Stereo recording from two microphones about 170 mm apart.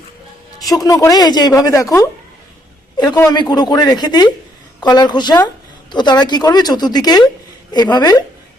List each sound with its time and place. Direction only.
0.6 s a woman's voice: 20° left (ahead or behind)